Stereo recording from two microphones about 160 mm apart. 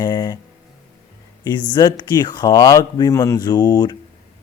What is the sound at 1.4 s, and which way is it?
Speech, 25° left (ahead or behind).